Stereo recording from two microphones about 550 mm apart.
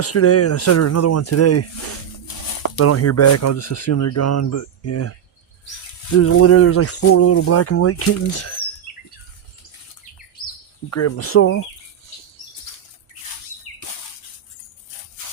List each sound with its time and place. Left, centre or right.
0.0 s speech: left
6.1 s speech: left
10.8 s speech: left